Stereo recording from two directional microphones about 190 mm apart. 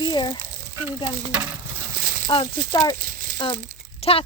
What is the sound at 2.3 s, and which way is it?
Speech, 25° left (ahead or behind).